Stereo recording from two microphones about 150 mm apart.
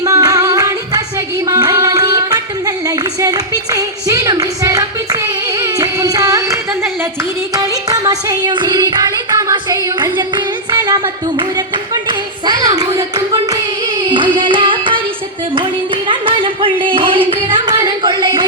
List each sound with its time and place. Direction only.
0.0 s music: 25° right (ahead or behind)
1.5 s a sound: 25° right (ahead or behind)
7.5 s music: 25° right (ahead or behind)
12.0 s clapping: 25° right (ahead or behind)
13.5 s hands: 30° right (ahead or behind)
15.5 s singing: 35° right (ahead or behind)
17.2 s a sound: 35° right (ahead or behind)